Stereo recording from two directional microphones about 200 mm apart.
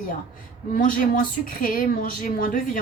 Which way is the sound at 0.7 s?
45° left (ahead or behind).